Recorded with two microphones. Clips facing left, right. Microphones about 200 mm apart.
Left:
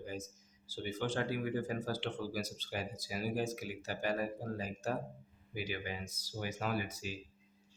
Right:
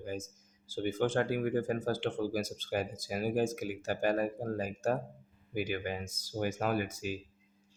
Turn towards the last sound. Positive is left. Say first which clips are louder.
# right 5 dB
turn(degrees=-50)  # may be behind; listen again after turning